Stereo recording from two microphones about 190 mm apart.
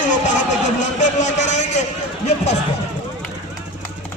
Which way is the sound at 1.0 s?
40° left (ahead or behind).